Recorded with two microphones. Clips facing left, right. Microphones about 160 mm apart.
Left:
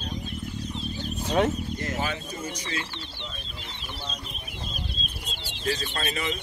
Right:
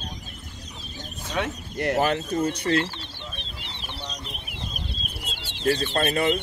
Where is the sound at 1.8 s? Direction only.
65° right (ahead or behind).